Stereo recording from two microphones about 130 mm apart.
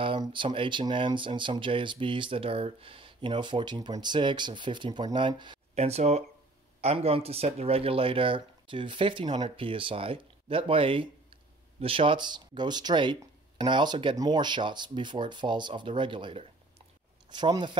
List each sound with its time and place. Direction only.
0.0 s speech: 40° right (ahead or behind)
5.8 s speech: 55° right (ahead or behind); by 17.7 s 35° right (ahead or behind)